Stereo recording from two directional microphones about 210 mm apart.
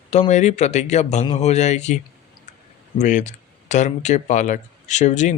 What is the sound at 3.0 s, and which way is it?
Speech, 35° left (ahead or behind).